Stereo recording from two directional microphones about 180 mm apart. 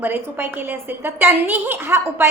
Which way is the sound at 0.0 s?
10° right (ahead or behind).